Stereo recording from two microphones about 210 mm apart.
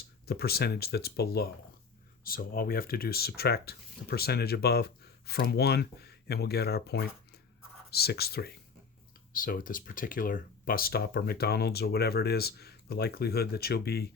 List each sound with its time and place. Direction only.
0.3 s speech: 50° left (ahead or behind)